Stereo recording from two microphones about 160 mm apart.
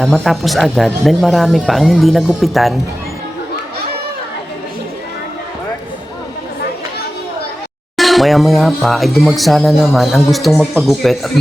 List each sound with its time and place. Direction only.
0.0 s speech: centre (ahead or behind)
7.9 s speech: centre (ahead or behind)